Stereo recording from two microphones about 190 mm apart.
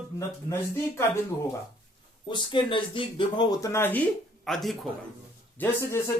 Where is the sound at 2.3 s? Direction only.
25° left (ahead or behind); by 4.7 s centre (ahead or behind).